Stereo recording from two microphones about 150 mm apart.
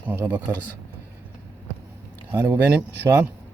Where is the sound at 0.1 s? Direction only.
10° right (ahead or behind).